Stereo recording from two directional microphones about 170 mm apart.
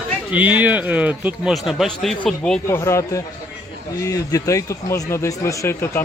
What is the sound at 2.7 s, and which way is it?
Speech, 15° left (ahead or behind).